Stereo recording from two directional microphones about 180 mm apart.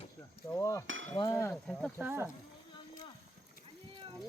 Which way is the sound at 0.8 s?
90° right.